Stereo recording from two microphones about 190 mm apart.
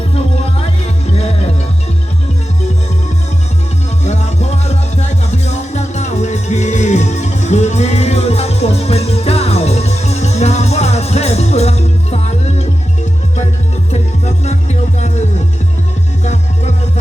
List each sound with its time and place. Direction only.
1.1 s music: 35° left (ahead or behind)
4.0 s music: 35° left (ahead or behind)
13.9 s music: 35° left (ahead or behind)
16.2 s music: 35° left (ahead or behind)